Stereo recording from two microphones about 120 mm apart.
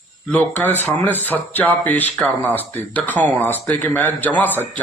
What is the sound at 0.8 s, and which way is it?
Speech, 15° left (ahead or behind).